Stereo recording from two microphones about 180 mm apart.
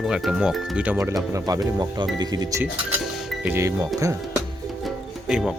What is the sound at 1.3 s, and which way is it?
Speech, 20° right (ahead or behind).